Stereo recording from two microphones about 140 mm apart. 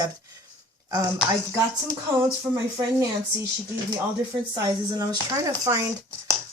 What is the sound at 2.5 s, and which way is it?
Speech, 10° right (ahead or behind).